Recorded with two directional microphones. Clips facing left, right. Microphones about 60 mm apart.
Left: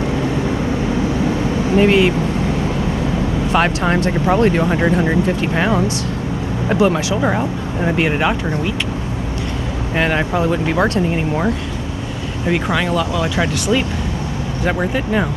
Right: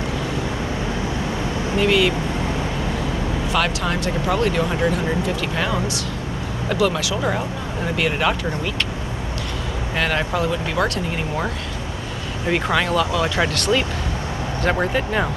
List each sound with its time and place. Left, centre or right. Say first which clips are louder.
1.8 s speech: left 4 dB; left
3.5 s speech: left 6 dB; left
9.9 s speech: left 4 dB; centre
10.5 s speech: left 5 dB; left
12.5 s speech: left 2 dB; centre